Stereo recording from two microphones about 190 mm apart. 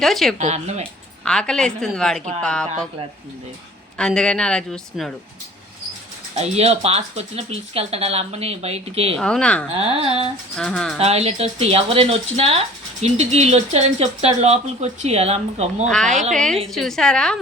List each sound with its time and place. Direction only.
0.0 s speech: centre (ahead or behind)
0.3 s speech: 35° right (ahead or behind)
1.2 s speech: 5° left (ahead or behind)
3.9 s speech: 5° left (ahead or behind)
6.3 s speech: 35° right (ahead or behind)
9.1 s speech: 5° left (ahead or behind)
9.7 s carnatic music: 30° right (ahead or behind)
10.6 s speech: centre (ahead or behind)
11.0 s speech: 35° right (ahead or behind)
15.9 s speech: 5° left (ahead or behind)